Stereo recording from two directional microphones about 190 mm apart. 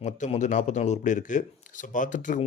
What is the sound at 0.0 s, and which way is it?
A man's voice, 40° left (ahead or behind).